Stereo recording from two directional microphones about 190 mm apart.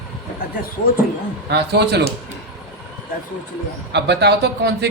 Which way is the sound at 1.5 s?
60° right (ahead or behind).